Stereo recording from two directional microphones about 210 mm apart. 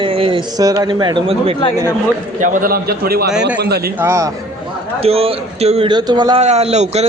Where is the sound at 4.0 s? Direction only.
15° right (ahead or behind).